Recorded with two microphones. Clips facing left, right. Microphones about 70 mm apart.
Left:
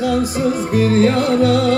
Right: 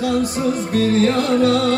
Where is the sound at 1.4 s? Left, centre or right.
Centre.